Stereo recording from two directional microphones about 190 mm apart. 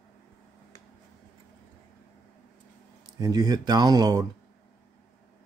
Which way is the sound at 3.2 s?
20° right (ahead or behind).